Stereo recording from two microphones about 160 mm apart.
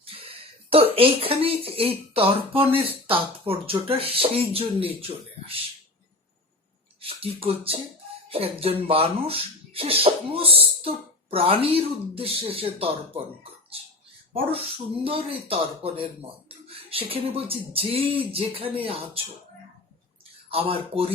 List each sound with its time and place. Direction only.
0.0 s speech: 35° right (ahead or behind)
7.0 s speech: 35° right (ahead or behind)
15.0 s speech: 35° right (ahead or behind)
20.5 s speech: 35° right (ahead or behind)